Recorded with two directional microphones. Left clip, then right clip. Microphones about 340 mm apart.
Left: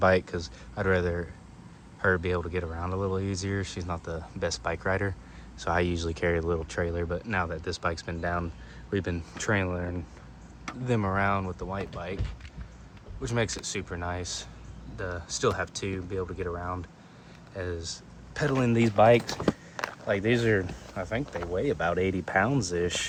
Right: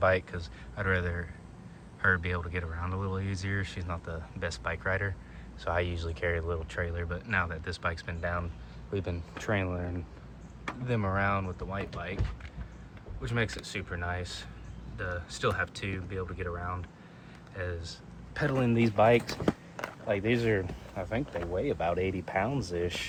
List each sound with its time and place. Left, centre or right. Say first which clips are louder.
0.0 s speech: left 3 dB; centre
13.2 s speech: left 3 dB; centre